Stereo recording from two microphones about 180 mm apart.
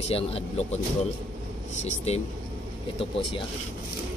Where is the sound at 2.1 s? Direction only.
35° left (ahead or behind).